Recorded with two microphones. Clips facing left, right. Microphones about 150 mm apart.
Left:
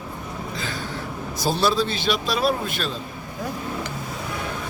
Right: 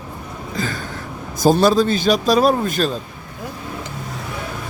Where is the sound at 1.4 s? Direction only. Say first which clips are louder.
Right 8 dB; 45° right (ahead or behind).